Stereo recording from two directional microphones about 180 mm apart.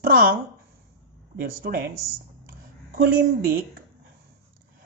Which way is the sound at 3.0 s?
55° right (ahead or behind).